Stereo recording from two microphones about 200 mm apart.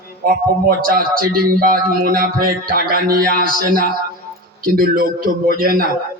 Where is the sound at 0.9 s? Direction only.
45° right (ahead or behind).